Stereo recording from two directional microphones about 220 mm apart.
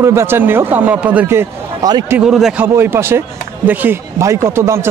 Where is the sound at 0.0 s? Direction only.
10° right (ahead or behind).